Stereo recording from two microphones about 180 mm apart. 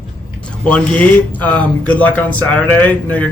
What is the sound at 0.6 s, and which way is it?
Speech, 5° left (ahead or behind).